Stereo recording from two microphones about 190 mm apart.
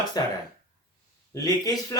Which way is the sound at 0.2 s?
20° left (ahead or behind).